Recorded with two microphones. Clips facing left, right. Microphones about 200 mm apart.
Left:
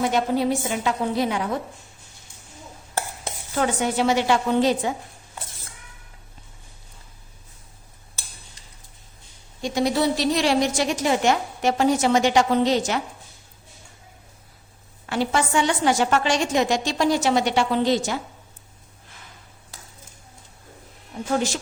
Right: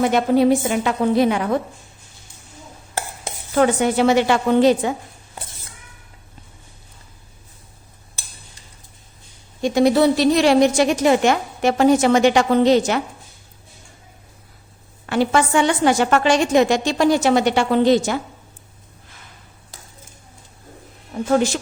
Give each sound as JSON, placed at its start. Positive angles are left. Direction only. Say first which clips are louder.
{"t": 0.0, "sound": "a woman's voice", "louder": "right 6 dB", "side_deg": -60}
{"t": 3.5, "sound": "a woman's voice", "louder": "right 6 dB", "side_deg": -65}
{"t": 9.6, "sound": "a woman's voice", "louder": "right 7 dB", "side_deg": -55}
{"t": 15.1, "sound": "a woman's voice", "louder": "right 5 dB", "side_deg": -60}